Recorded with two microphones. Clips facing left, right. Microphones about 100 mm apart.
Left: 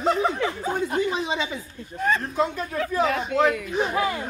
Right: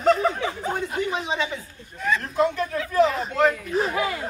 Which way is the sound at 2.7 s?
65° left (ahead or behind).